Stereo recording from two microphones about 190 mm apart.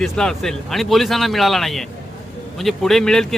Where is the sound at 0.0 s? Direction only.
5° left (ahead or behind).